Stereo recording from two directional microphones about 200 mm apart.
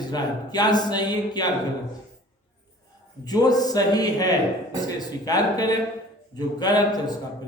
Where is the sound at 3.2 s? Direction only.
20° left (ahead or behind).